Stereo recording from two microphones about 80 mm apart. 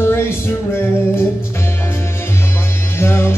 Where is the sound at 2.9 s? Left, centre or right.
Left.